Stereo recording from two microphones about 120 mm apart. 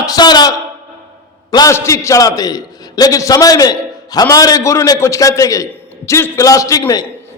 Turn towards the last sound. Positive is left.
turn(degrees=30)  # may be behind; listen again after turning